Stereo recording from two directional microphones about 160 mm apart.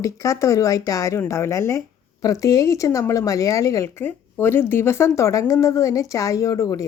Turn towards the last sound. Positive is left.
turn(degrees=20)  # may be behind; listen again after turning